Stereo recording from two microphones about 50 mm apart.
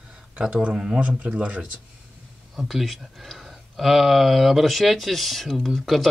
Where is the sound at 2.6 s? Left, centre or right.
Centre.